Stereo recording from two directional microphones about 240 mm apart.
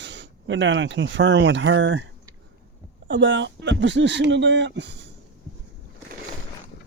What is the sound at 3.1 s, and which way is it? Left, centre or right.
Speech, right.